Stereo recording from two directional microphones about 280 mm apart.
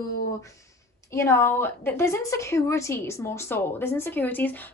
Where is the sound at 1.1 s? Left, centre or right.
Centre.